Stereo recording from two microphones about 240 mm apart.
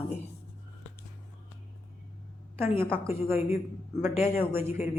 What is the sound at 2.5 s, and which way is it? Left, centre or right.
A woman's voice, centre.